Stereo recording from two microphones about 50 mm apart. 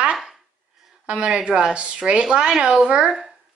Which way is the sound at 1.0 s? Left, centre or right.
Right.